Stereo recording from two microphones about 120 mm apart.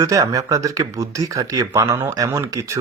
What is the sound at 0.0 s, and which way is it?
Speech, 30° right (ahead or behind).